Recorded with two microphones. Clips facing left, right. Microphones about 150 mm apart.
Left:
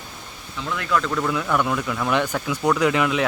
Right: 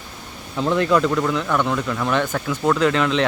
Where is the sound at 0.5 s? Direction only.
35° right (ahead or behind).